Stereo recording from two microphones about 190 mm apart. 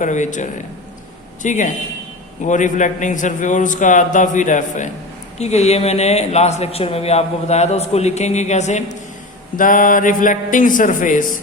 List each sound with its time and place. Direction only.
0.0 s speech: 40° left (ahead or behind)